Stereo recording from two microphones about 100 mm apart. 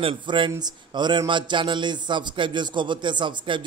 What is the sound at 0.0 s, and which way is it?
A man's voice, 55° right (ahead or behind).